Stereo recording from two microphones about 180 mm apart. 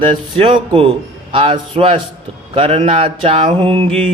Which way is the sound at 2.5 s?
30° right (ahead or behind).